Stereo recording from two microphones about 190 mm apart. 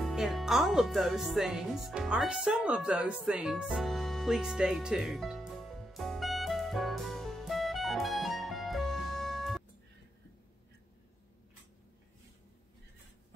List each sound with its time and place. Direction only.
0.0 s music: centre (ahead or behind)